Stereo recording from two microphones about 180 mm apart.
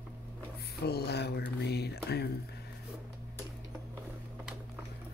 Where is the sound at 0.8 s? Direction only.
65° left (ahead or behind).